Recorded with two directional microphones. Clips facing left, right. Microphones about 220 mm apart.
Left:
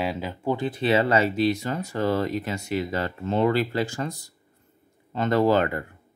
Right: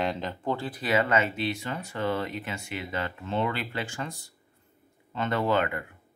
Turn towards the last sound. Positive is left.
turn(degrees=35)  # may be behind; listen again after turning